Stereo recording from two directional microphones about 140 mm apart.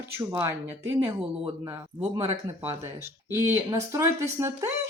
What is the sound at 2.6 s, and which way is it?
Speech, 20° right (ahead or behind).